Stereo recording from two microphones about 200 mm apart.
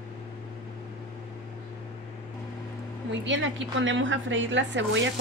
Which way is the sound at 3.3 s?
70° right (ahead or behind).